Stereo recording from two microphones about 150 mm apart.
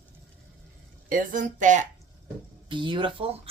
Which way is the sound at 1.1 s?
60° right (ahead or behind).